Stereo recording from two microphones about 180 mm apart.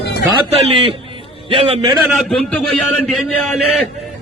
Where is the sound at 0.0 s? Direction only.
65° left (ahead or behind).